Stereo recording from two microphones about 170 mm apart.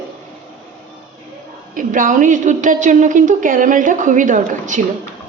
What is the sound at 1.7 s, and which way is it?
A woman's voice, 50° right (ahead or behind).